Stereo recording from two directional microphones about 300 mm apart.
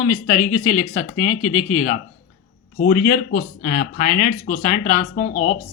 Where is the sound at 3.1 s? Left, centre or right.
Left.